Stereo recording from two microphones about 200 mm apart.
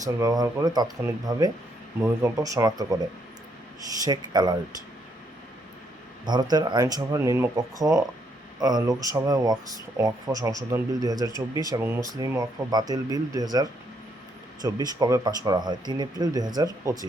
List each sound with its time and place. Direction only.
0.0 s speech: 15° right (ahead or behind)
6.2 s speech: 20° right (ahead or behind)